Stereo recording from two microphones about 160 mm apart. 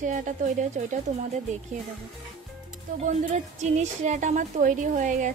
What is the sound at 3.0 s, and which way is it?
A woman's voice, 50° right (ahead or behind).